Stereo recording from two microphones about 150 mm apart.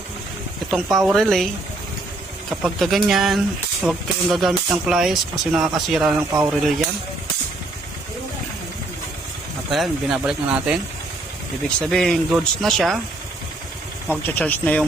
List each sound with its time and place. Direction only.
0.7 s speech: centre (ahead or behind)
2.5 s speech: centre (ahead or behind)
9.7 s speech: centre (ahead or behind)
11.8 s speech: 5° left (ahead or behind)
14.3 s speech: 10° left (ahead or behind)